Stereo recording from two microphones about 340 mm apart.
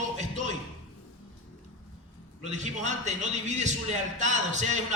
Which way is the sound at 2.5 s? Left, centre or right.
Right.